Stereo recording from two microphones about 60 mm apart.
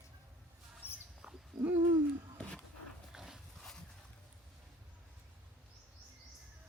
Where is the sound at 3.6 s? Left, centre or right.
Centre.